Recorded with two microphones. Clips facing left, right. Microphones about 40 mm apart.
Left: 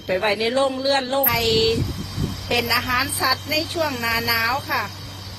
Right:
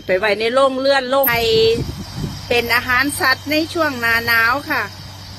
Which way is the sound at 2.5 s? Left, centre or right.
Right.